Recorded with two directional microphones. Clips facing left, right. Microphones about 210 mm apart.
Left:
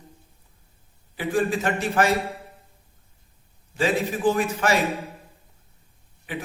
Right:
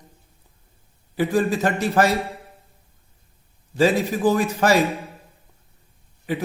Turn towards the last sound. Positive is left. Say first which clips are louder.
# right 6 dB
turn(degrees=-40)  # may be behind; listen again after turning